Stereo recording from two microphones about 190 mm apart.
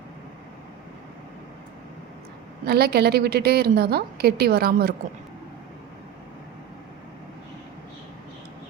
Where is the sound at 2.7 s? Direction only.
55° right (ahead or behind).